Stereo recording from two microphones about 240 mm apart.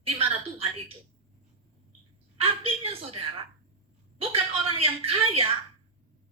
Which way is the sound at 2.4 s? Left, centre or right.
Right.